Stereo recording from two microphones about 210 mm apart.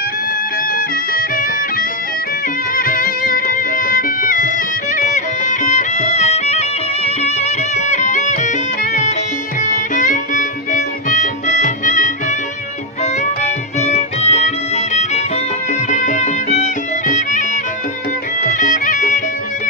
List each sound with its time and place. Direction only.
0.7 s music: 40° left (ahead or behind)